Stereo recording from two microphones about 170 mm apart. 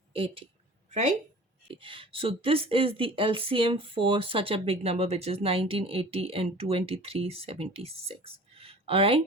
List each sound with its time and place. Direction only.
0.1 s a woman's voice: 35° right (ahead or behind)
0.9 s a sound: 40° right (ahead or behind)
1.6 s speech: 30° right (ahead or behind)